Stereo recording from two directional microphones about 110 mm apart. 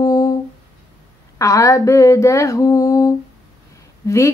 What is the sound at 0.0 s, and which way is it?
Humming, 30° left (ahead or behind).